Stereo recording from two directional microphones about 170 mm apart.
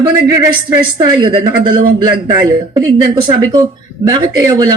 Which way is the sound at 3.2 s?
25° right (ahead or behind).